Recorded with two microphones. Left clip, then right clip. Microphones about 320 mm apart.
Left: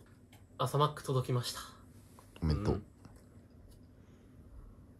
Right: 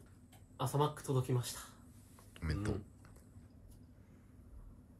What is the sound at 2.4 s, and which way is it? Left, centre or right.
Speech, centre.